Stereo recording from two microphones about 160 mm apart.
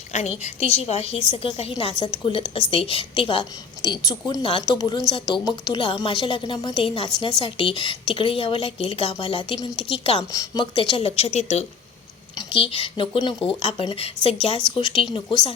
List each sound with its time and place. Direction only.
0.1 s a woman's voice: 45° left (ahead or behind)
10.3 s a woman's voice: 25° left (ahead or behind)